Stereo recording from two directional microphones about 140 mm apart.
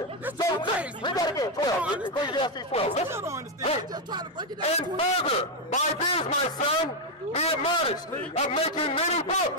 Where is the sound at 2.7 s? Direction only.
45° left (ahead or behind).